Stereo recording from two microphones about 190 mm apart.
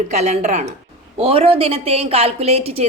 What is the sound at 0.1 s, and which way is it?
A woman's voice, 35° right (ahead or behind).